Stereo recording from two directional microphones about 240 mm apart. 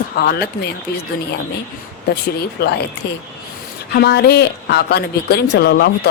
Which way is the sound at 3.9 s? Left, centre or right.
Left.